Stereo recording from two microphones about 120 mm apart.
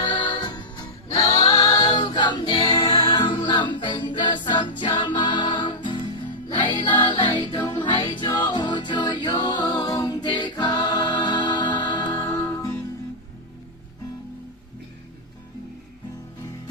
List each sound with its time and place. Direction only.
0.0 s music: 40° left (ahead or behind)
7.3 s music: 30° left (ahead or behind)
12.5 s music: 20° left (ahead or behind)